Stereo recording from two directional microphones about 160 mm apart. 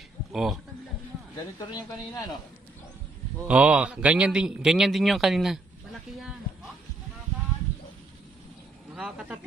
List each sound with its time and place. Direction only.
0.3 s speech: centre (ahead or behind)
1.7 s speech: 25° left (ahead or behind)
3.4 s a man's voice: 5° right (ahead or behind)
8.9 s a man's voice: 5° right (ahead or behind)